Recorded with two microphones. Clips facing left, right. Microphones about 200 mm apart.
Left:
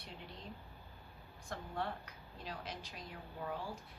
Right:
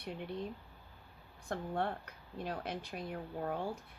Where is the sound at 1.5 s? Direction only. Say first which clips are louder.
Right 5 dB; 55° right (ahead or behind).